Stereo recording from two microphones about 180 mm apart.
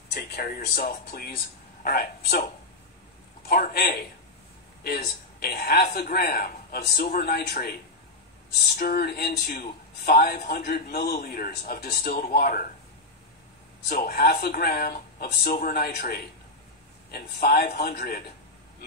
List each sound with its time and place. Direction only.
0.1 s a man's voice: 60° left (ahead or behind)
3.4 s a man's voice: 55° left (ahead or behind)
8.7 s a man's voice: 55° left (ahead or behind)
13.8 s a man's voice: 55° left (ahead or behind)